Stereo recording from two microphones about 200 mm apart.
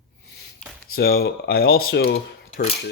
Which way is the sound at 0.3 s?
55° left (ahead or behind).